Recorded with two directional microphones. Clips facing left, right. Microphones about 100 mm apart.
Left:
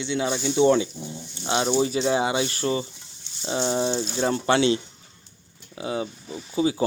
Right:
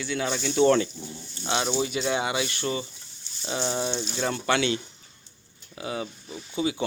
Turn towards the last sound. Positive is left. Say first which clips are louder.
# left 4 dB
turn(degrees=30)  # may be behind; listen again after turning